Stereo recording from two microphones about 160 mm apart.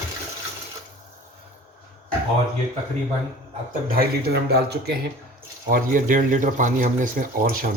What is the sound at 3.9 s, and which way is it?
Speech, 80° right.